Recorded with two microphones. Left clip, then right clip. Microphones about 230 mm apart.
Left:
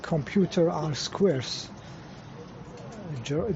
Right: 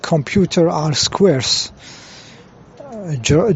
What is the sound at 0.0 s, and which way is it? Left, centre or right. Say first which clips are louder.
Speech: right 11 dB; right.